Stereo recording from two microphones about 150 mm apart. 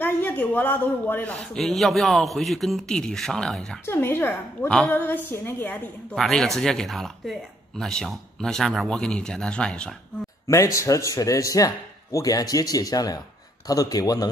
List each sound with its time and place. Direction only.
0.0 s a man's voice: 10° left (ahead or behind)
3.8 s a woman's voice: 15° left (ahead or behind)
6.1 s a man's voice: centre (ahead or behind)
10.4 s speech: 20° left (ahead or behind)